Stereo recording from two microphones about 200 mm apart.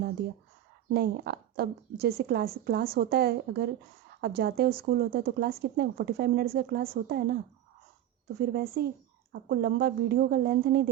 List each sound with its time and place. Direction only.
0.9 s a woman's voice: 50° right (ahead or behind)
8.4 s a woman's voice: 50° right (ahead or behind)